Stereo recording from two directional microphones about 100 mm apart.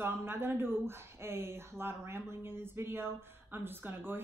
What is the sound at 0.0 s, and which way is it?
Speech, 20° right (ahead or behind).